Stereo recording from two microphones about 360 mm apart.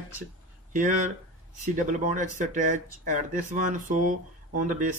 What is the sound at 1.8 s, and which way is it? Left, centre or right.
Speech, right.